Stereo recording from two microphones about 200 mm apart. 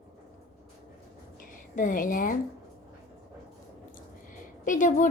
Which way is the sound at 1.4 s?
40° left (ahead or behind).